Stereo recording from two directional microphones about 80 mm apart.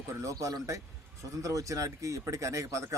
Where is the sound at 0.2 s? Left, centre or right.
Right.